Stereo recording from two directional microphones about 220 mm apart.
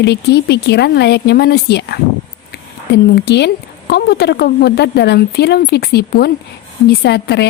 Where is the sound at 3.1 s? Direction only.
50° left (ahead or behind).